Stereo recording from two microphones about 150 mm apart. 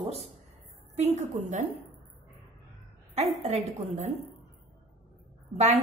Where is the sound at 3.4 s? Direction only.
50° right (ahead or behind).